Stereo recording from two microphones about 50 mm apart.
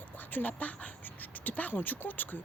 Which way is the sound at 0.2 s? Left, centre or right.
Left.